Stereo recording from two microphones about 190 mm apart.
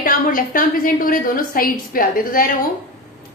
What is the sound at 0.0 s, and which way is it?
A woman's voice, 45° left (ahead or behind).